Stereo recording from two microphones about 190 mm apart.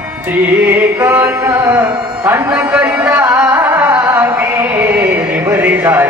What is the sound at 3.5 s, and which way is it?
Music, 20° right (ahead or behind).